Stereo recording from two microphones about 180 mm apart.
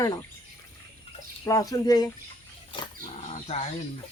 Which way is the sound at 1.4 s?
20° left (ahead or behind).